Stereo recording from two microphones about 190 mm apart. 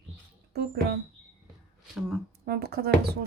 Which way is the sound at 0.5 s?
55° right (ahead or behind).